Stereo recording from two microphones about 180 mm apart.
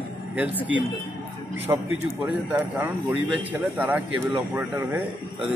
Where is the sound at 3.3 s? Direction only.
10° right (ahead or behind).